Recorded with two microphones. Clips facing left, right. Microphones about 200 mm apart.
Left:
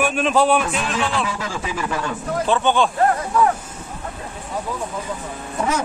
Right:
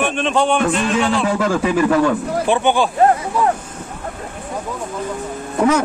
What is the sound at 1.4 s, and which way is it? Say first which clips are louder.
Speech: right 10 dB; 60° right (ahead or behind).